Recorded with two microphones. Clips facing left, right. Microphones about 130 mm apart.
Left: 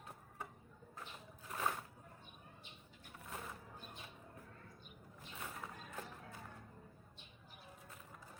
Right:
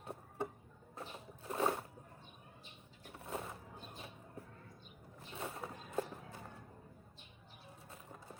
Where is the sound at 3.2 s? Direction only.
25° right (ahead or behind).